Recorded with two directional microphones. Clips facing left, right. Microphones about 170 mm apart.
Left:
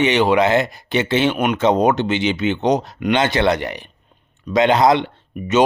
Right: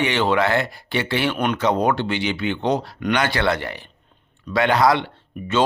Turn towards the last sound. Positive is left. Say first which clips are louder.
# left 4 dB
turn(degrees=20)  # may be behind; listen again after turning